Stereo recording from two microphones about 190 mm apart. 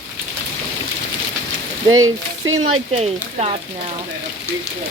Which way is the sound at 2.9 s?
35° right (ahead or behind).